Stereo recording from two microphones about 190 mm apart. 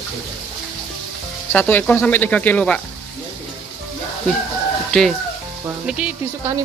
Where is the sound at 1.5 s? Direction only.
10° left (ahead or behind).